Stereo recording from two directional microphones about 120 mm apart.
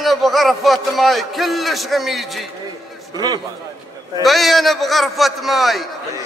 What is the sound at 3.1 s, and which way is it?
Speech, 35° right (ahead or behind).